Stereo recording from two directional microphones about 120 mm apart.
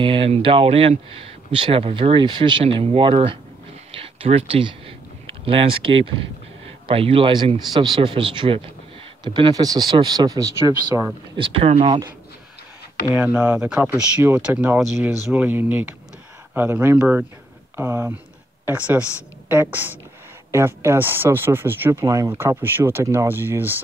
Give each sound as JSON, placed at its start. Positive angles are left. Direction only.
{"t": 0.0, "sound": "speech", "side_deg": -45}
{"t": 3.9, "sound": "a sound", "side_deg": -50}
{"t": 6.9, "sound": "speech", "side_deg": -50}
{"t": 11.3, "sound": "speech", "side_deg": -50}
{"t": 13.1, "sound": "speech", "side_deg": -15}
{"t": 22.6, "sound": "speech", "side_deg": -15}